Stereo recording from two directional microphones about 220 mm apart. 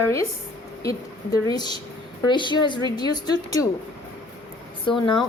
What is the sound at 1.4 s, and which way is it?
Speech, 20° left (ahead or behind).